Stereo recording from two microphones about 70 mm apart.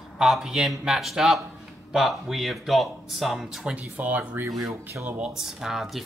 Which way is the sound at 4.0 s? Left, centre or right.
Right.